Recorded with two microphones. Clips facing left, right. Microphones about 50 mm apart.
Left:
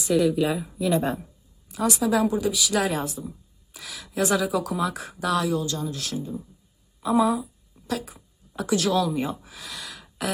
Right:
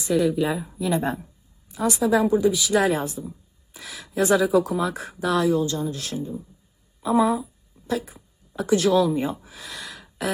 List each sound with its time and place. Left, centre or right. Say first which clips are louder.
0.3 s speech: even; right
3.7 s a sound: right 1 dB; right
4.2 s speech: right 5 dB; right